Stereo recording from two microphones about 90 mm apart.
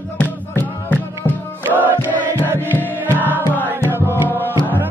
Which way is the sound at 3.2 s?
20° left (ahead or behind).